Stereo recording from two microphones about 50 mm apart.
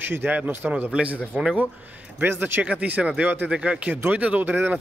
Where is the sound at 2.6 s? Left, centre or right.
Right.